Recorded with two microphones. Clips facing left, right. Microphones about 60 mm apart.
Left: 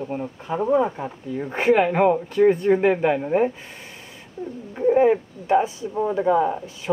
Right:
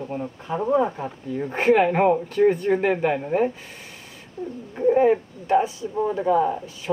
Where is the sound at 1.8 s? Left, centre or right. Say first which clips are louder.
Even; centre.